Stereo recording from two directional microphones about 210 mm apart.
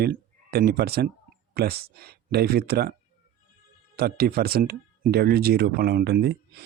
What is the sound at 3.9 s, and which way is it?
Speech, 50° right (ahead or behind).